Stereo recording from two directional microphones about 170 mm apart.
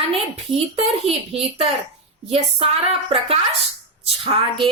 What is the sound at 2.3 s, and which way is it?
Music, 35° right (ahead or behind).